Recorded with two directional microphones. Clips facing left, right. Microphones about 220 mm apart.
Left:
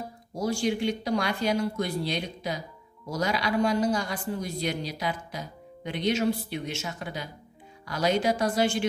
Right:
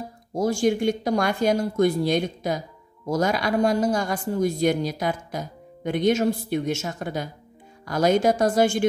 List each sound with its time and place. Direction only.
0.3 s a man's voice: 50° right (ahead or behind)